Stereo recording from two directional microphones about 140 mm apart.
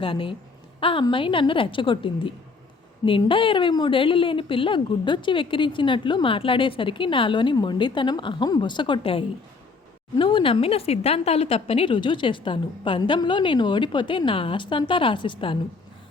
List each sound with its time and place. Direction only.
0.0 s a woman's voice: 40° left (ahead or behind)